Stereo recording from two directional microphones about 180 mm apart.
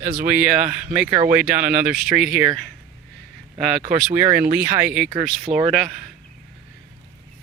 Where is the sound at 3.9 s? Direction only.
10° right (ahead or behind).